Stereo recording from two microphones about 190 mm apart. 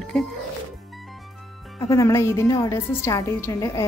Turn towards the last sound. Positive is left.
turn(degrees=15)  # may be behind; listen again after turning